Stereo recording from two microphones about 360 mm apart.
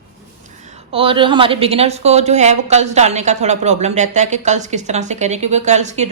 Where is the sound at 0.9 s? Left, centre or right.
Centre.